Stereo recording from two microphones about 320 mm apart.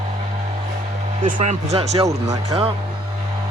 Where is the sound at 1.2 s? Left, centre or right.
Right.